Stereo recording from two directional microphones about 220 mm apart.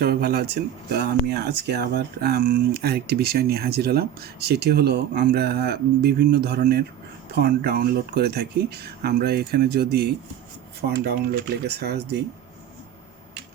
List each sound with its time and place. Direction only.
0.0 s speech: 45° right (ahead or behind)